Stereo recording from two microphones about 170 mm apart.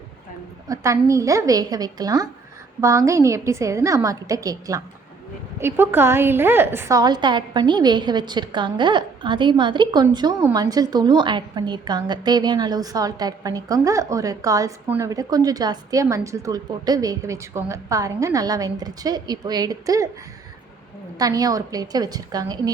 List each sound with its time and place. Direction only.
0.7 s a woman's voice: 15° right (ahead or behind)
21.2 s a woman's voice: 20° right (ahead or behind)